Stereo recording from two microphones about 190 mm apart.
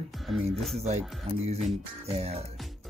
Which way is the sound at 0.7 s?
35° right (ahead or behind).